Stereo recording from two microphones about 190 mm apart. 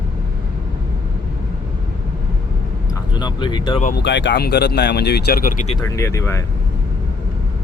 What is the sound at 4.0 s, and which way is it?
Speech, 65° left (ahead or behind).